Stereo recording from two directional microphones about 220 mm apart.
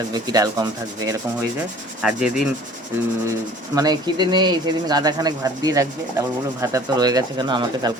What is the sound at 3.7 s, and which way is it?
Speech, 15° right (ahead or behind).